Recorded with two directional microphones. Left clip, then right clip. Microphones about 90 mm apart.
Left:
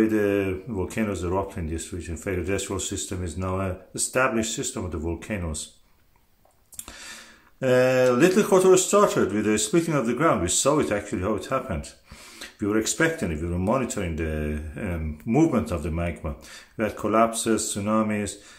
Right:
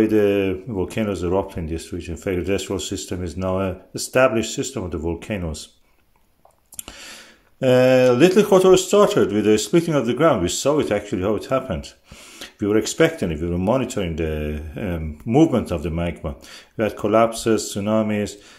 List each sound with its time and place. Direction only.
0.0 s speech: 40° right (ahead or behind)
6.9 s a sound: 40° right (ahead or behind)
7.6 s speech: 40° right (ahead or behind)